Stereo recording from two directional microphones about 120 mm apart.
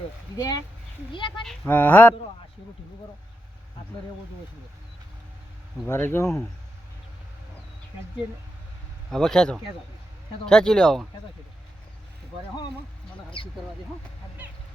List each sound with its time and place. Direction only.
0.3 s speech: 30° left (ahead or behind)
1.6 s speech: 15° left (ahead or behind)
5.9 s speech: 20° left (ahead or behind)
9.0 s speech: 5° left (ahead or behind)
13.4 s speech: 45° left (ahead or behind)